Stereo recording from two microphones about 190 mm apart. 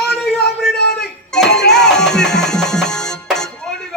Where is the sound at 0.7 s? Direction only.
55° left (ahead or behind).